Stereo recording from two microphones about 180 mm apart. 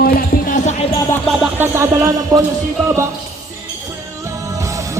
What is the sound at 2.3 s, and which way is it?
Speech, 20° right (ahead or behind).